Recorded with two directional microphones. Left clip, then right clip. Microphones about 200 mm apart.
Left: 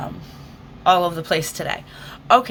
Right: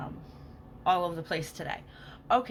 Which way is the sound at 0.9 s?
25° left (ahead or behind).